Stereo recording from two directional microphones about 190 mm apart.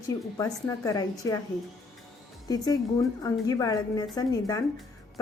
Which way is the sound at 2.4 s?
20° left (ahead or behind).